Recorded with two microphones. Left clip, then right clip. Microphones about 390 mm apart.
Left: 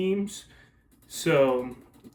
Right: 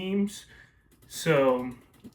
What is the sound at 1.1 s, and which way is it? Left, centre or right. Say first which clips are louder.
Speech: left 2 dB; centre.